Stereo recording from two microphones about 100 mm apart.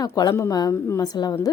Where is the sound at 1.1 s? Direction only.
45° left (ahead or behind).